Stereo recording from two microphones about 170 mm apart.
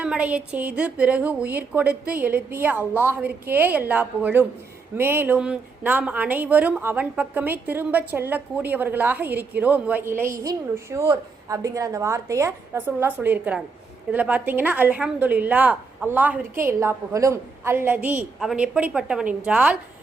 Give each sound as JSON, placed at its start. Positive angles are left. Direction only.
{"t": 0.0, "sound": "speech", "side_deg": -5}